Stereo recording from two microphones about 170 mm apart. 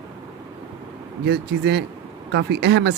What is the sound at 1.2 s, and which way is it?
Speech, 80° right.